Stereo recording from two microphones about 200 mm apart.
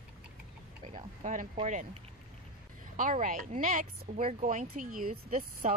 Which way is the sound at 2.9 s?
40° right (ahead or behind).